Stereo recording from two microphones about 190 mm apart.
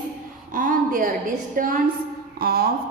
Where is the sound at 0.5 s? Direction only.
45° right (ahead or behind).